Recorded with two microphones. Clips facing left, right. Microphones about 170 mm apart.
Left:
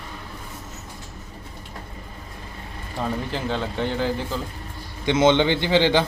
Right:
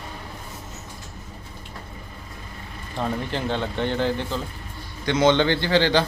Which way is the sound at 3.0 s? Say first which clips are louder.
Even; 5° left (ahead or behind).